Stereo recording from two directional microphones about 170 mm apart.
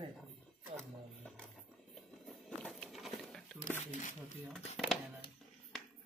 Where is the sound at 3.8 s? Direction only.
45° left (ahead or behind).